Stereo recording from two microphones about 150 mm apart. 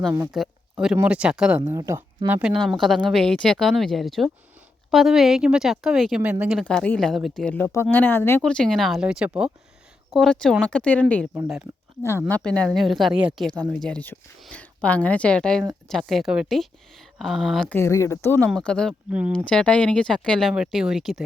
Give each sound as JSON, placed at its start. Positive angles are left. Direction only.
{"t": 0.3, "sound": "speech", "side_deg": 0}
{"t": 1.7, "sound": "speech", "side_deg": -20}
{"t": 2.2, "sound": "speech", "side_deg": -10}
{"t": 12.3, "sound": "speech", "side_deg": 5}
{"t": 17.7, "sound": "speech", "side_deg": 20}
{"t": 19.1, "sound": "speech", "side_deg": -10}
{"t": 19.5, "sound": "speech", "side_deg": 5}